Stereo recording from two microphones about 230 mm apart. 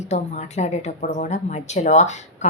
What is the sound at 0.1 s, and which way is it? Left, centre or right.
Speech, left.